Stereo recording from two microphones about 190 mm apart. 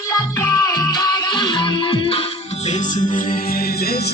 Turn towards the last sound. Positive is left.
turn(degrees=55)  # may be behind; listen again after turning